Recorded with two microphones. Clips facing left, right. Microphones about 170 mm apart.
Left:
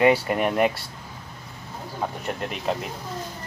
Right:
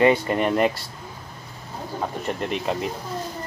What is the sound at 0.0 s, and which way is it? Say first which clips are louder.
Speech: right 1 dB; 10° left (ahead or behind).